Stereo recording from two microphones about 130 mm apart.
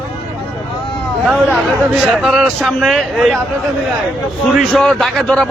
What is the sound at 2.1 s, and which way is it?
A man's voice, centre (ahead or behind).